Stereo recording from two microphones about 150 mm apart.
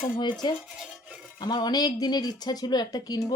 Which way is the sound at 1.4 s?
30° left (ahead or behind).